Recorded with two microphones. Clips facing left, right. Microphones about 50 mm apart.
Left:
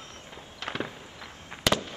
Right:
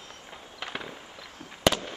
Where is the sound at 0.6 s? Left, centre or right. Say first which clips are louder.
Left 1 dB; centre.